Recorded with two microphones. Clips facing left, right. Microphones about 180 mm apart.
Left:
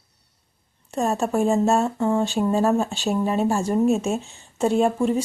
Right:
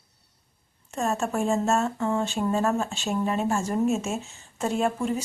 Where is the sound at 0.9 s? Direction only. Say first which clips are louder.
Left 4 dB; 35° left (ahead or behind).